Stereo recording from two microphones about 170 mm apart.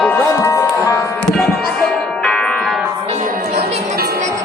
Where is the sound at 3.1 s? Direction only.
50° right (ahead or behind).